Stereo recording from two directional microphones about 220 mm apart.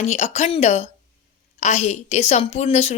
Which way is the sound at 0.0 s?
30° left (ahead or behind).